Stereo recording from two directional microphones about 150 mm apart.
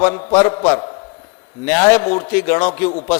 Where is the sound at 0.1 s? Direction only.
35° left (ahead or behind).